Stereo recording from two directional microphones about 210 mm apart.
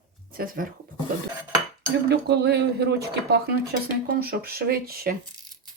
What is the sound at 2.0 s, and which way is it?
Speech, 50° right (ahead or behind).